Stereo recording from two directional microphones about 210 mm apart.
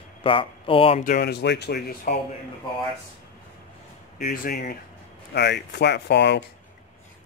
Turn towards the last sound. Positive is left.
turn(degrees=55)  # may be behind; listen again after turning